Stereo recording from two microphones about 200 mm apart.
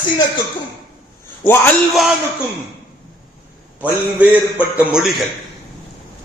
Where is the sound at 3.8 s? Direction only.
5° right (ahead or behind).